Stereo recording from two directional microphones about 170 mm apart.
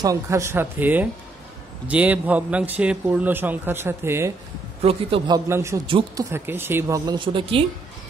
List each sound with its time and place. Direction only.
0.0 s a man's voice: 20° right (ahead or behind)
4.8 s a man's voice: 35° right (ahead or behind)
5.5 s a man's voice: 15° right (ahead or behind)
5.9 s speech: 30° right (ahead or behind)
6.3 s a man's voice: 15° right (ahead or behind); by 7.6 s 30° right (ahead or behind)